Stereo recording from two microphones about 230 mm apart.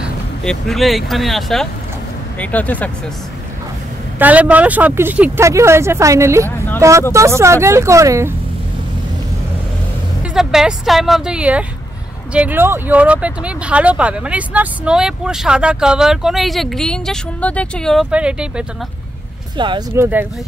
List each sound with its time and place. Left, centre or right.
0.0 s speech: centre
4.2 s speech: centre
10.3 s speech: centre
19.5 s speech: right
19.9 s speech: centre